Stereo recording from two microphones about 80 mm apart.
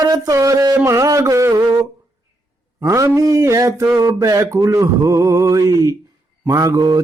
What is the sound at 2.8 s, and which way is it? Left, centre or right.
Music, right.